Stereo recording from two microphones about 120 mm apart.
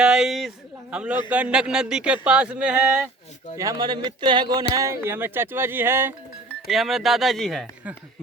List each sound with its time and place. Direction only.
0.0 s speech: 5° right (ahead or behind)
3.6 s speech: 30° right (ahead or behind)
6.7 s speech: centre (ahead or behind)